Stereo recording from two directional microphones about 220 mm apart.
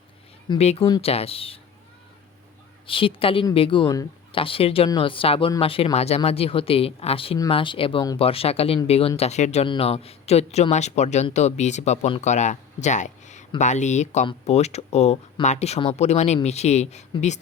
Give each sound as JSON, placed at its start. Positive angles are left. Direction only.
{"t": 0.4, "sound": "speech", "side_deg": 25}
{"t": 2.8, "sound": "speech", "side_deg": 25}